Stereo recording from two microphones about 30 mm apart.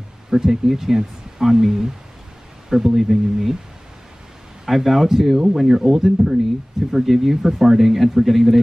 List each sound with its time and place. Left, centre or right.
0.3 s speech: centre
4.6 s speech: centre
6.0 s speech: centre
6.9 s speech: centre